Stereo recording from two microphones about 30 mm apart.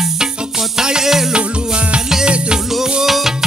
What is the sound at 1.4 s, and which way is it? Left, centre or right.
Music, right.